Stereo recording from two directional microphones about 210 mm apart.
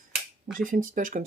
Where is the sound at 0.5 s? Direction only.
40° right (ahead or behind).